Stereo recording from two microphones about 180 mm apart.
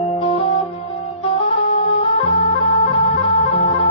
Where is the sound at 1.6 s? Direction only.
30° left (ahead or behind).